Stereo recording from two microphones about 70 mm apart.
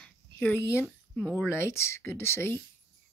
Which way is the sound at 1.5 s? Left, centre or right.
Left.